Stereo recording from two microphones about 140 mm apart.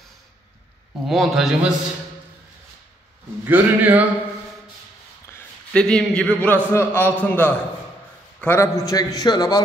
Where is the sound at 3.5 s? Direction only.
10° right (ahead or behind).